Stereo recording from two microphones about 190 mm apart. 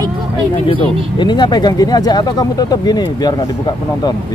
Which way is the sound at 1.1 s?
25° left (ahead or behind).